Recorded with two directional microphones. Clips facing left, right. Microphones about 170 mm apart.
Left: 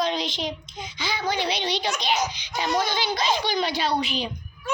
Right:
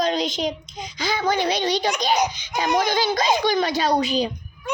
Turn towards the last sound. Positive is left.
turn(degrees=-40)  # may be behind; listen again after turning